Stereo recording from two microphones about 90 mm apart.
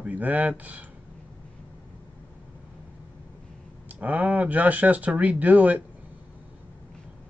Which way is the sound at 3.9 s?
15° right (ahead or behind).